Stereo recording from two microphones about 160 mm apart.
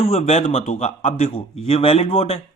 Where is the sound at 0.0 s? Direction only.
40° left (ahead or behind).